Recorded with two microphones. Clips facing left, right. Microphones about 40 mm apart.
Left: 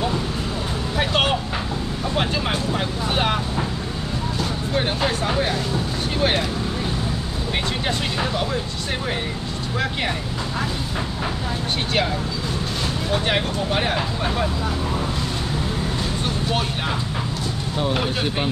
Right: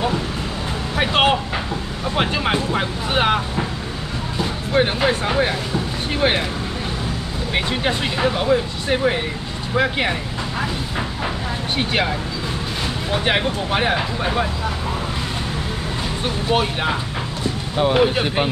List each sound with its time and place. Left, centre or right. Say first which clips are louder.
0.9 s vehicle: right 4 dB; centre
2.1 s speech: right 4 dB; right
7.5 s speech: right 4 dB; centre
13.1 s speech: right 3 dB; right
16.4 s speech: right 8 dB; centre